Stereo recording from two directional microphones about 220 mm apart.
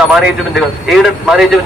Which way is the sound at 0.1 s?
Centre (ahead or behind).